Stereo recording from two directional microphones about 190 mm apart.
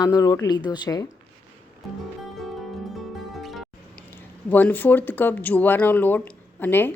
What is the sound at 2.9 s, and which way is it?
Music, centre (ahead or behind).